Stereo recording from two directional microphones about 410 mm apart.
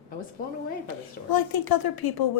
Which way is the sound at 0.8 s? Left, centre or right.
Left.